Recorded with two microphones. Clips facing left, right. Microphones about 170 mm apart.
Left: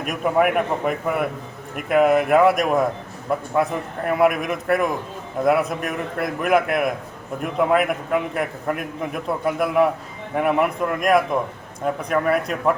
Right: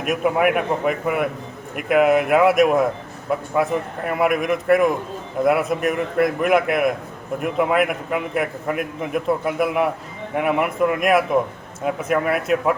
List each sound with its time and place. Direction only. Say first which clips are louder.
0.0 s a man's voice: right 1 dB; 5° right (ahead or behind)